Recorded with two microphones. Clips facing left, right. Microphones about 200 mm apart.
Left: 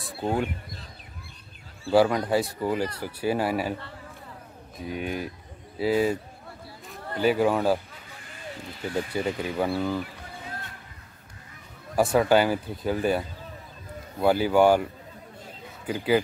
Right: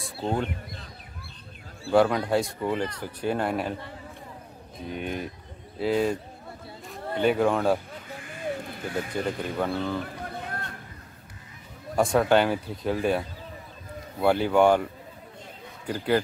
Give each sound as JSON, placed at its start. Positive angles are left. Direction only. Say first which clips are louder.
{"t": 0.2, "sound": "speech", "louder": "left 1 dB", "side_deg": 10}
{"t": 1.9, "sound": "speech", "louder": "left 1 dB", "side_deg": 5}
{"t": 4.7, "sound": "speech", "louder": "left 1 dB", "side_deg": 5}
{"t": 9.1, "sound": "speech", "louder": "left 1 dB", "side_deg": 5}
{"t": 10.2, "sound": "run", "louder": "right 4 dB", "side_deg": -55}
{"t": 11.9, "sound": "speech", "louder": "left 1 dB", "side_deg": 5}